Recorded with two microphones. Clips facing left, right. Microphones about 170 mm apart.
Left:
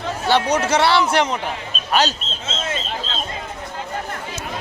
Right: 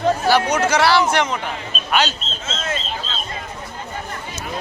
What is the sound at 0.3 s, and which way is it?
Speech, 30° left (ahead or behind).